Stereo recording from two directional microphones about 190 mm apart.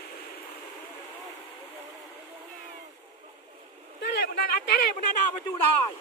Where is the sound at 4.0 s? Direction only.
55° left (ahead or behind).